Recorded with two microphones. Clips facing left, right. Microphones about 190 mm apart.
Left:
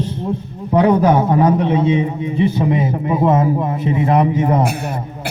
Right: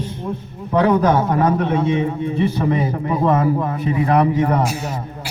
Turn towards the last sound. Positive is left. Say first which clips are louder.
# left 1 dB
turn(degrees=20)  # may be behind; listen again after turning